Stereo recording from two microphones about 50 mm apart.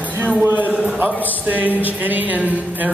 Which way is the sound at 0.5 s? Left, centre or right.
Right.